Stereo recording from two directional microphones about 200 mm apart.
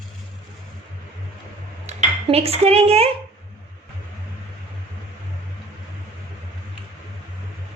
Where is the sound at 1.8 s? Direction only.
30° right (ahead or behind).